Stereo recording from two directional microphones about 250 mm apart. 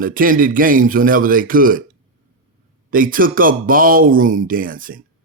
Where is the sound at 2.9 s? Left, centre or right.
Right.